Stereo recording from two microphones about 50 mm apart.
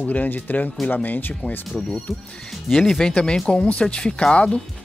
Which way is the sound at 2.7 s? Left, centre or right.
Centre.